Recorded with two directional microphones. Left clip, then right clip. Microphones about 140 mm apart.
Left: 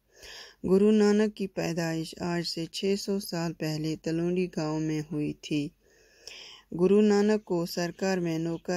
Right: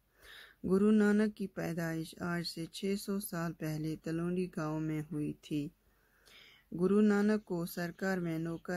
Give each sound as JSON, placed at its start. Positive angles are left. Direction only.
{"t": 0.7, "sound": "speech", "side_deg": 20}
{"t": 6.8, "sound": "speech", "side_deg": 15}